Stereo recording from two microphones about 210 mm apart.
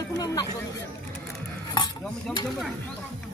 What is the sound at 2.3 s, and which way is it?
Speech, centre (ahead or behind).